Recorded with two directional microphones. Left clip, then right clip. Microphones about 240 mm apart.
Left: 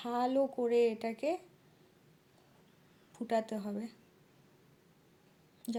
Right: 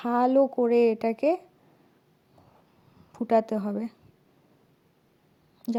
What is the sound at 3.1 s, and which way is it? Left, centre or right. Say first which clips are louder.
Speech: right 11 dB; right.